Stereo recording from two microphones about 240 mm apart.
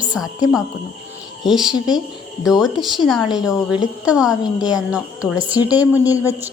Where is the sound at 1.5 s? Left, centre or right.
Centre.